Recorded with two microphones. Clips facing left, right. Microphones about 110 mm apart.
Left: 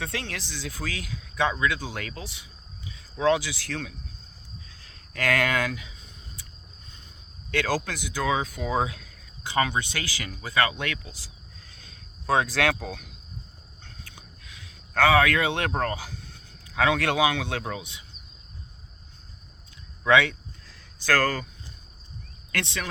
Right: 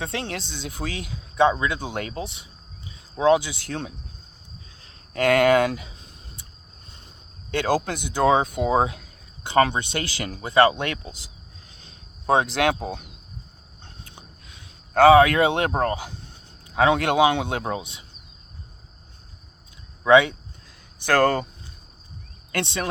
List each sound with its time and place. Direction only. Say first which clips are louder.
0.0 s speech: right 4 dB; 25° right (ahead or behind)
7.5 s speech: right 4 dB; 25° right (ahead or behind)
9.7 s speech: right 3 dB; 25° right (ahead or behind)
11.7 s cricket: right 1 dB; 25° right (ahead or behind)
13.8 s a sound: right 3 dB; 20° right (ahead or behind)
16.6 s speech: right 4 dB; 25° right (ahead or behind)
20.1 s speech: right 5 dB; 20° right (ahead or behind)
22.5 s speech: right 4 dB; 25° right (ahead or behind)